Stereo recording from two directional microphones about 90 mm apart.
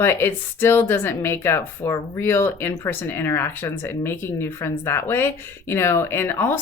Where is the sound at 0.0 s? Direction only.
25° left (ahead or behind).